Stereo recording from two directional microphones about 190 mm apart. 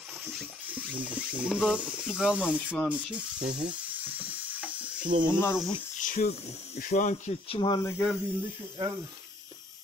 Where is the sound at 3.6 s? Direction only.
5° right (ahead or behind).